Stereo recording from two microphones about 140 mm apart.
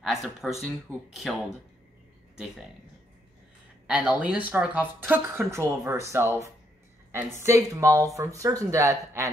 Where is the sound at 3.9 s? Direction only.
10° right (ahead or behind).